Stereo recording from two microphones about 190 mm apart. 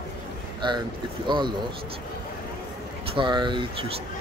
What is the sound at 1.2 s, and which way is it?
Speech, 25° right (ahead or behind).